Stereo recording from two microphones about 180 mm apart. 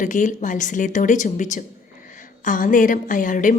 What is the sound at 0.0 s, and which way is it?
A woman's voice, 45° left (ahead or behind).